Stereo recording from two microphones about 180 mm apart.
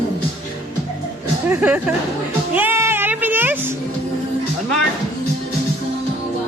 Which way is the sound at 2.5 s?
10° right (ahead or behind).